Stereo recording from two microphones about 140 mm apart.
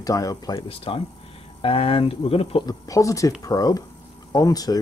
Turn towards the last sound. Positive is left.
turn(degrees=25)  # may be behind; listen again after turning